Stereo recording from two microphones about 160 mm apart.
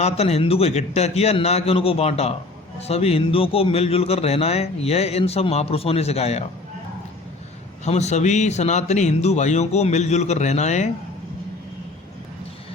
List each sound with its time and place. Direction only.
0.0 s a man's voice: 40° left (ahead or behind)
7.9 s a man's voice: 45° left (ahead or behind)